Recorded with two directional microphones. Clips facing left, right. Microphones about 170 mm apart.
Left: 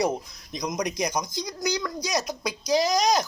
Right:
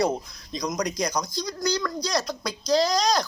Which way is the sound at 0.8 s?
20° left (ahead or behind).